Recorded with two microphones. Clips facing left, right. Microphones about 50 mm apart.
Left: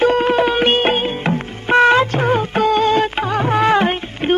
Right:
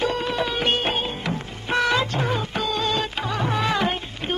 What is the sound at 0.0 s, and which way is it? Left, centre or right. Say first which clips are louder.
Music: left 10 dB; left.